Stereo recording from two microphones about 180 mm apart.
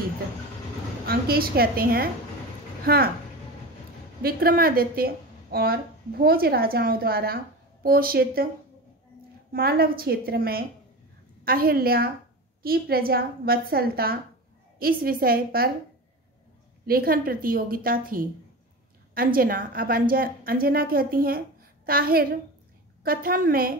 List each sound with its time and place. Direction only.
1.0 s a woman's voice: 55° right (ahead or behind)
4.2 s a woman's voice: 55° right (ahead or behind)
9.5 s a woman's voice: 55° right (ahead or behind)
16.8 s a woman's voice: 55° right (ahead or behind)